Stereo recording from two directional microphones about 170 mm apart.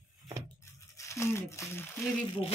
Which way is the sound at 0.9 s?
15° left (ahead or behind).